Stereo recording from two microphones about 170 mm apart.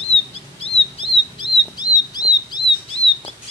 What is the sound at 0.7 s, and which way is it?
Chirp, 35° left (ahead or behind).